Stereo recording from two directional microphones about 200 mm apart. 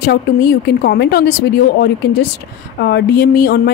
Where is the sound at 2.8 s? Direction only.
60° left (ahead or behind).